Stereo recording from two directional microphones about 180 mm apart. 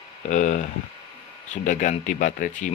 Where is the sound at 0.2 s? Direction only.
40° left (ahead or behind).